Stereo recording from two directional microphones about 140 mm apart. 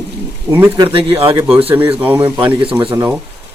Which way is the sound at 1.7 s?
15° right (ahead or behind).